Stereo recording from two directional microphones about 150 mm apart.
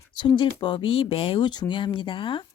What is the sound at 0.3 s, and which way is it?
Speech, 35° left (ahead or behind).